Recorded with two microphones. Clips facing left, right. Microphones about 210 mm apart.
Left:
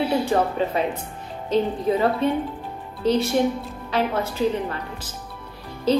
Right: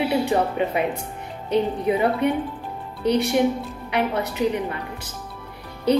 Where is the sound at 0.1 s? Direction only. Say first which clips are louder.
Even; 15° right (ahead or behind).